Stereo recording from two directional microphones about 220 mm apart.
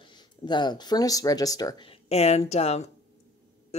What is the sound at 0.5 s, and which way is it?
Speech, 20° left (ahead or behind).